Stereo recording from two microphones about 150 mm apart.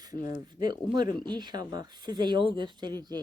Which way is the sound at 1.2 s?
30° right (ahead or behind).